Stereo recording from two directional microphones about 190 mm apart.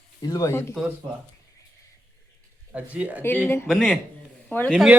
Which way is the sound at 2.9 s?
10° right (ahead or behind).